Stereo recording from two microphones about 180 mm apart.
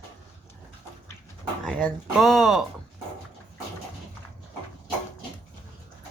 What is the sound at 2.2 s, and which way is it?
Speech, centre (ahead or behind).